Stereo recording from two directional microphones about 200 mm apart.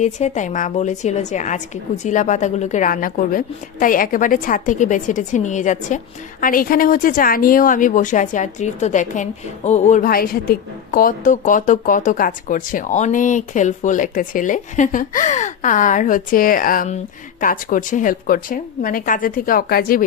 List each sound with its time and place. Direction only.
0.0 s a woman's voice: 35° left (ahead or behind)